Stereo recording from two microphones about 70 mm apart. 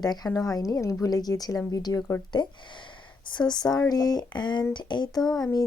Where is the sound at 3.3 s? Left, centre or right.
Left.